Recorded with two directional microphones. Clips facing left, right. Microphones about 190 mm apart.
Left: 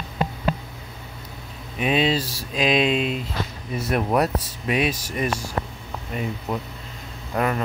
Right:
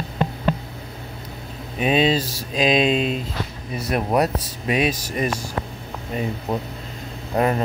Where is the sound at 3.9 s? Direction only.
20° right (ahead or behind).